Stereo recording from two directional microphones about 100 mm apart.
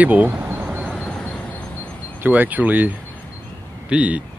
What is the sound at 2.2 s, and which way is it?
Speech, 15° right (ahead or behind).